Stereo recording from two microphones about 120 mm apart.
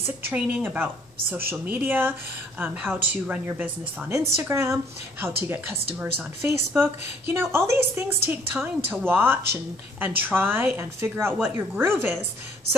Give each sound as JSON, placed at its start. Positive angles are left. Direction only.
{"t": 0.2, "sound": "a woman's voice", "side_deg": -15}